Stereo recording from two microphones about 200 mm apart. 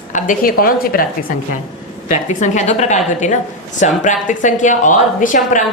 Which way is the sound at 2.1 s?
35° left (ahead or behind).